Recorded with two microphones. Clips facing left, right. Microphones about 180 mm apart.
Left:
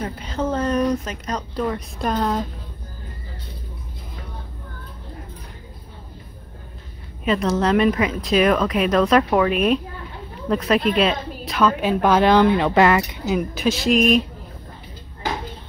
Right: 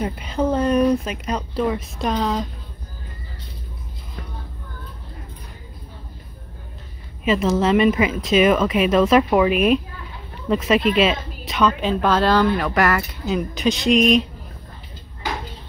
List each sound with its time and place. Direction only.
0.0 s speech: 10° right (ahead or behind)
7.2 s a woman's voice: 5° right (ahead or behind); by 13.2 s 20° left (ahead or behind)
13.3 s speech: 5° left (ahead or behind)